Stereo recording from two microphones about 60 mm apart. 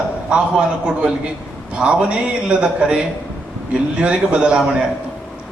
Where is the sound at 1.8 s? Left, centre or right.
Centre.